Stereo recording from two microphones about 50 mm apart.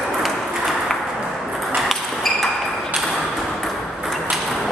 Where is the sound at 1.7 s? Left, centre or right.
Centre.